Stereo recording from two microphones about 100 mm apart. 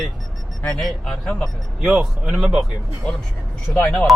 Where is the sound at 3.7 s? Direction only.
30° left (ahead or behind).